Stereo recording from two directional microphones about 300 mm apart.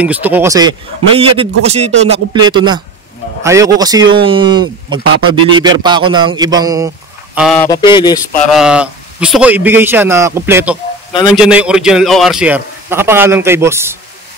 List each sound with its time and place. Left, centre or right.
0.0 s a man's voice: centre
7.3 s speech: centre
8.5 s a man's voice: centre